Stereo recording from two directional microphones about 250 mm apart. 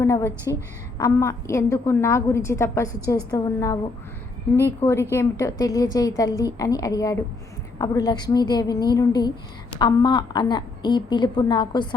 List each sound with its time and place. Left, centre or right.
0.0 s a woman's voice: centre